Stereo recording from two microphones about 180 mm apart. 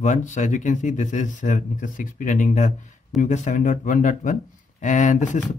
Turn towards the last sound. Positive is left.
turn(degrees=45)  # may be behind; listen again after turning